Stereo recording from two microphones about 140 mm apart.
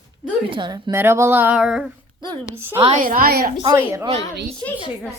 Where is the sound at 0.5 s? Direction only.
35° right (ahead or behind).